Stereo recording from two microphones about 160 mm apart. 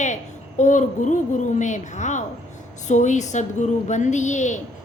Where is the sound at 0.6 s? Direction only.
50° left (ahead or behind).